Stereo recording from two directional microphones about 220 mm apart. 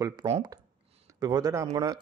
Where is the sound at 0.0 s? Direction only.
15° right (ahead or behind).